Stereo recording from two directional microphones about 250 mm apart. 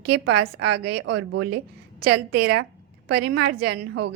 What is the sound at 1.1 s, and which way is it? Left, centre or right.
Speech, right.